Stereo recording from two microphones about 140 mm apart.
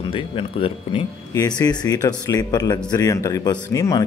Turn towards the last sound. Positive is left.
turn(degrees=25)  # may be behind; listen again after turning